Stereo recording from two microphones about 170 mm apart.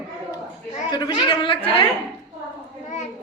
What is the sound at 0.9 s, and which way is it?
Speech, 25° left (ahead or behind).